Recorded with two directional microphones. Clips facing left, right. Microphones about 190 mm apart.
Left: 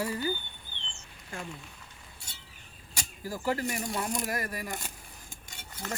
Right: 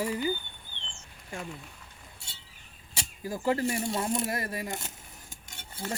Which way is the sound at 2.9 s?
20° right (ahead or behind).